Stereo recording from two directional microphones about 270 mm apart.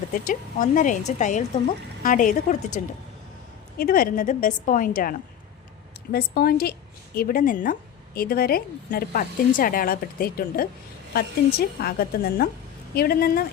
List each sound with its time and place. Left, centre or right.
0.1 s speech: left
3.8 s a woman's voice: left